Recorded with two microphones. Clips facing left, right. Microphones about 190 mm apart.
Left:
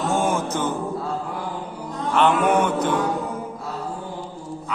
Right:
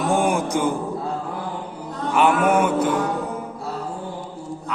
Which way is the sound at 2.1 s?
10° right (ahead or behind).